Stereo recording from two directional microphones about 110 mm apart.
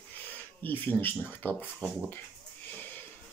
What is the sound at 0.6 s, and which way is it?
Speech, 15° left (ahead or behind).